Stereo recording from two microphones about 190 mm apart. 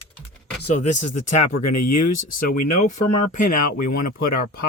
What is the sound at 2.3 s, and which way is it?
Speech, 45° left (ahead or behind).